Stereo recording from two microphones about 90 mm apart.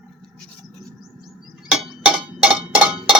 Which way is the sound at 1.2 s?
5° right (ahead or behind).